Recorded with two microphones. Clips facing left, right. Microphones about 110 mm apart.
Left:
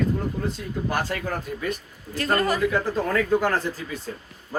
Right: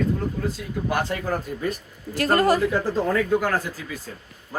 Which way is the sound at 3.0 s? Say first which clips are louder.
Even; 15° right (ahead or behind).